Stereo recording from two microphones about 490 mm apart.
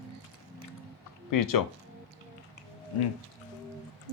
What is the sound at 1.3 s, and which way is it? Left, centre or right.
Speech, left.